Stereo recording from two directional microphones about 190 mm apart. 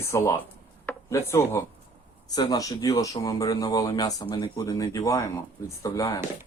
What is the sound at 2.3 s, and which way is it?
Speech, 20° left (ahead or behind).